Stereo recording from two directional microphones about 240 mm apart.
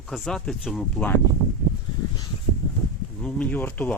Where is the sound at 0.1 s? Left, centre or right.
Centre.